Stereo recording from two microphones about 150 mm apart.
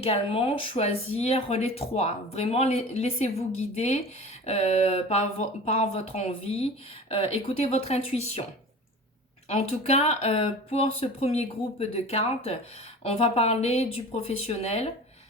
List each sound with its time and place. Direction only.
0.0 s speech: 40° left (ahead or behind)
9.5 s speech: 45° left (ahead or behind)